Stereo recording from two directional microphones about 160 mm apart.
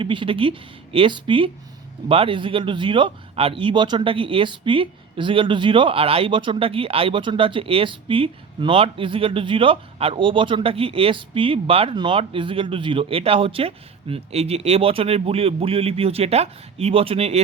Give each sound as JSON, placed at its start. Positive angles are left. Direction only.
{"t": 0.0, "sound": "speech", "side_deg": -30}